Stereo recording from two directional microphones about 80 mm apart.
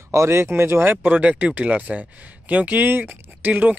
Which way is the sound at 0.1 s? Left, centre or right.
Right.